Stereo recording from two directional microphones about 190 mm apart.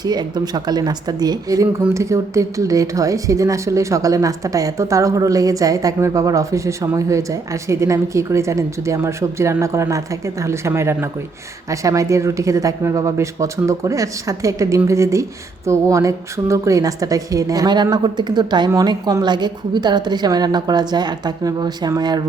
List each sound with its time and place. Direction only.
0.0 s speech: 20° right (ahead or behind)